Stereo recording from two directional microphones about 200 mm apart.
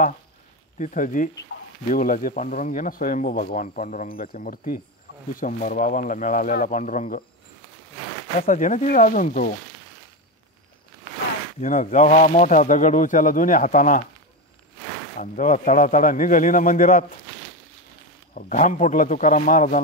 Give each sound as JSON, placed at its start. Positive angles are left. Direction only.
{"t": 0.7, "sound": "speech", "side_deg": 40}
{"t": 8.4, "sound": "speech", "side_deg": 40}
{"t": 11.6, "sound": "speech", "side_deg": 40}
{"t": 15.1, "sound": "speech", "side_deg": 40}
{"t": 18.3, "sound": "speech", "side_deg": 40}